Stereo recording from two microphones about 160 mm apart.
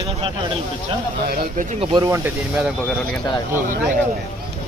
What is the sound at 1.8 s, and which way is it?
Speech, 35° right (ahead or behind).